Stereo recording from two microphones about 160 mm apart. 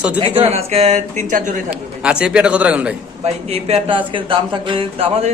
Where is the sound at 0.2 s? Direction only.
35° right (ahead or behind).